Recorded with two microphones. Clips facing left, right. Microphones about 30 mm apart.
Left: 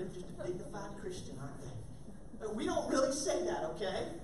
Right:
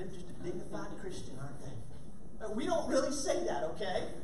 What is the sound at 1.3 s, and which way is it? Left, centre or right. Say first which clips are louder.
A woman's voice: right 1 dB; centre.